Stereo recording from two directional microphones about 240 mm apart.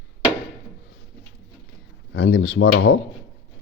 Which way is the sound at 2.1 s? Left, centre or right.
Left.